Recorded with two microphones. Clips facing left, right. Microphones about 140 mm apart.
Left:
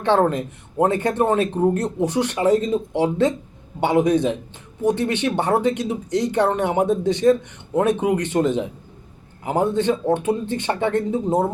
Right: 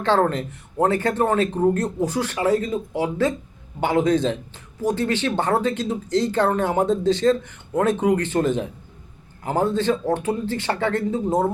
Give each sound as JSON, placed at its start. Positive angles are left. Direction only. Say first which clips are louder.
{"t": 0.0, "sound": "speech", "louder": "left 2 dB", "side_deg": 20}
{"t": 1.8, "sound": "speech", "louder": "left 2 dB", "side_deg": 25}
{"t": 11.3, "sound": "speech", "louder": "even", "side_deg": 5}